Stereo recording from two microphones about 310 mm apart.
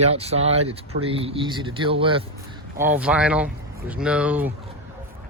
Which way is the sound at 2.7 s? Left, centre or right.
Centre.